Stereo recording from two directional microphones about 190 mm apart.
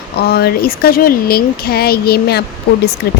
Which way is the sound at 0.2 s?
55° left (ahead or behind).